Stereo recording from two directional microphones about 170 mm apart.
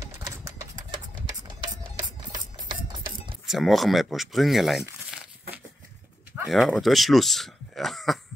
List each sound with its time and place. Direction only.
0.0 s a sound: 20° right (ahead or behind)
2.5 s music: 25° right (ahead or behind)
3.4 s speech: centre (ahead or behind)
6.4 s speech: centre (ahead or behind)